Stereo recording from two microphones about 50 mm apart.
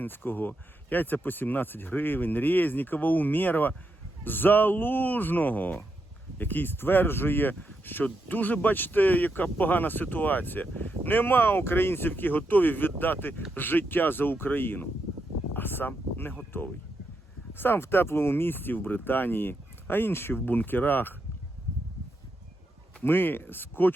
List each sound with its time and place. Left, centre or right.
0.0 s speech: left
17.5 s speech: left
23.0 s speech: left